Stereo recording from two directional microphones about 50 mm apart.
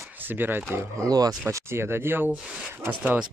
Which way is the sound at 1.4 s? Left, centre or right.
Right.